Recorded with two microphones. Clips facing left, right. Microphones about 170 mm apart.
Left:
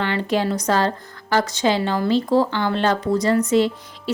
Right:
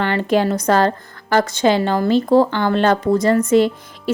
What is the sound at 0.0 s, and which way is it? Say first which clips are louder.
A woman's voice: right 4 dB; 50° right (ahead or behind).